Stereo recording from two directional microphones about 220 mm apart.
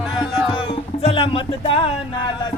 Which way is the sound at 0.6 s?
25° left (ahead or behind).